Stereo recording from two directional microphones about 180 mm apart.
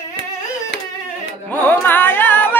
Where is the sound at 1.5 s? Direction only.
10° left (ahead or behind).